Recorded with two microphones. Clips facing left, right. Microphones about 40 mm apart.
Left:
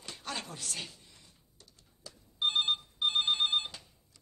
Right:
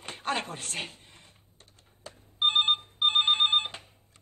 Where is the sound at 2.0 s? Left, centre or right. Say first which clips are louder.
Right 5 dB; right.